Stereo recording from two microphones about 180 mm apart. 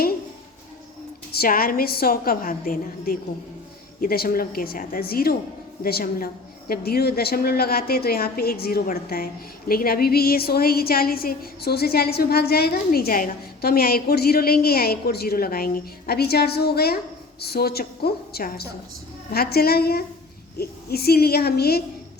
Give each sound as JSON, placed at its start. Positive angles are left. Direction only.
{"t": 1.3, "sound": "a woman's voice", "side_deg": 55}